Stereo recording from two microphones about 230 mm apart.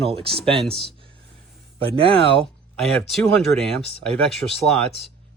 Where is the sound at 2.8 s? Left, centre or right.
Centre.